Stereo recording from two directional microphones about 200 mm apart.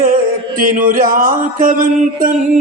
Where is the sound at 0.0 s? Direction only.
45° right (ahead or behind).